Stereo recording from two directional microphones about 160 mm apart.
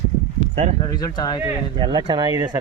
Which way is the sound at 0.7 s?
25° left (ahead or behind).